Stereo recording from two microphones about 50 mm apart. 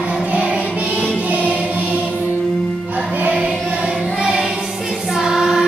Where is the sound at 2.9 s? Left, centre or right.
Right.